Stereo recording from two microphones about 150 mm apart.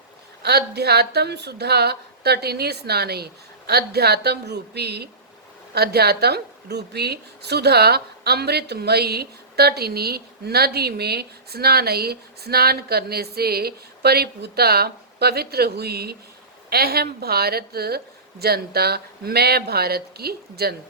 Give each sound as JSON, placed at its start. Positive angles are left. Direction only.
{"t": 0.4, "sound": "a woman's voice", "side_deg": -90}